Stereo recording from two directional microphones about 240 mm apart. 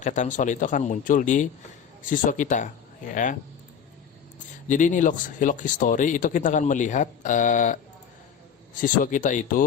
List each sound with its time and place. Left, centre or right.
0.0 s speech: left
4.7 s speech: left